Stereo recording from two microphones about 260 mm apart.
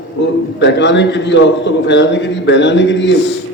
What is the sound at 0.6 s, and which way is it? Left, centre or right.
A man's voice, left.